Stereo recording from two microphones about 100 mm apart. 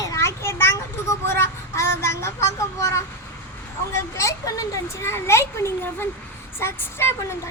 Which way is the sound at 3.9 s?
30° left (ahead or behind).